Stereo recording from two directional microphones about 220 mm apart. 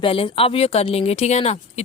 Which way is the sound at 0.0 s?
25° left (ahead or behind).